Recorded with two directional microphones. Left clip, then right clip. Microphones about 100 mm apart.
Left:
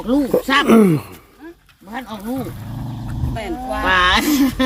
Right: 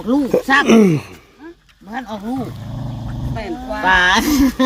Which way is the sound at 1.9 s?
65° right (ahead or behind).